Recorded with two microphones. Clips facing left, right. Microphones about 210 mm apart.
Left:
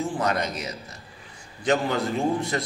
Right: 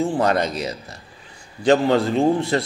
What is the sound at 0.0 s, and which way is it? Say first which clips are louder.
A man's voice: right 6 dB; 30° right (ahead or behind).